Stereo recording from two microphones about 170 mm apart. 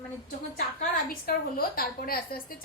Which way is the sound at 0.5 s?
60° left (ahead or behind).